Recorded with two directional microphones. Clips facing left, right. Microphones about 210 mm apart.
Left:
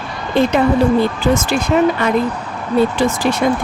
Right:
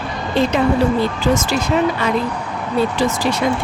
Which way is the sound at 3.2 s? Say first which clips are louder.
Left 2 dB; 55° left (ahead or behind).